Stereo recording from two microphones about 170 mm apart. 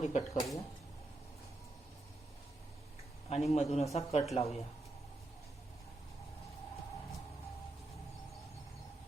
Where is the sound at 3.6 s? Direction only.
40° left (ahead or behind).